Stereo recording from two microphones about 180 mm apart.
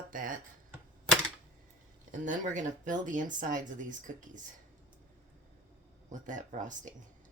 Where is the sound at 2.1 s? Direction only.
45° right (ahead or behind).